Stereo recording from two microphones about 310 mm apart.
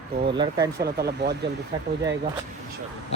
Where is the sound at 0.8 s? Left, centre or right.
Right.